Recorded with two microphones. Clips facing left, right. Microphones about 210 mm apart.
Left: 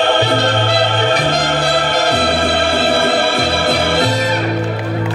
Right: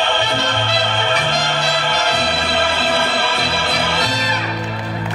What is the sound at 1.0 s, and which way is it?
Music, 40° left (ahead or behind).